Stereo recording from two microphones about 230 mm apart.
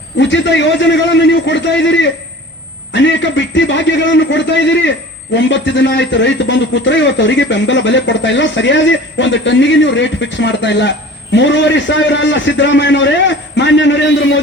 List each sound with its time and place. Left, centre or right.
0.2 s a man's voice: left